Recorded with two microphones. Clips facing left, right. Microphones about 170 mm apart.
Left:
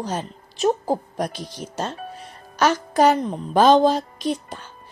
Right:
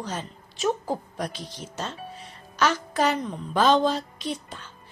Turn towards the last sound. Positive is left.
turn(degrees=45)  # may be behind; listen again after turning